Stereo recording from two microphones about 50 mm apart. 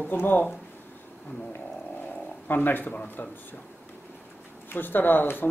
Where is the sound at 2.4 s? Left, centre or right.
Left.